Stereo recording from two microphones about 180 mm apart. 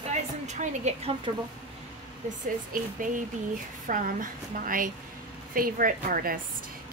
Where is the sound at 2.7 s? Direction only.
50° right (ahead or behind).